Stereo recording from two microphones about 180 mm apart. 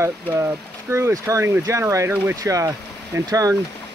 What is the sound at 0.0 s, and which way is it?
Speech, 15° right (ahead or behind).